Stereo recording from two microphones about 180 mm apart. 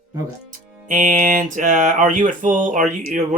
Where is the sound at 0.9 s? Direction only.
45° right (ahead or behind).